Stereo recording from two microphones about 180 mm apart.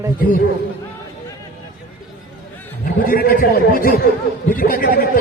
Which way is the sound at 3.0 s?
55° left (ahead or behind).